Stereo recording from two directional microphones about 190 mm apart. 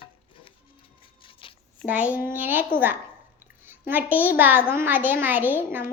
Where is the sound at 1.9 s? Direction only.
5° right (ahead or behind).